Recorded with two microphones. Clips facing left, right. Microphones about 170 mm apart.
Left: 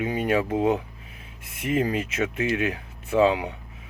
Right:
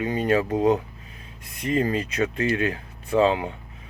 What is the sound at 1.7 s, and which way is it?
Speech, 15° left (ahead or behind).